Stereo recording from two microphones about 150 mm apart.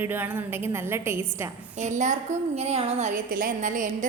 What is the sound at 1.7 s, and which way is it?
A woman's voice, 55° right (ahead or behind).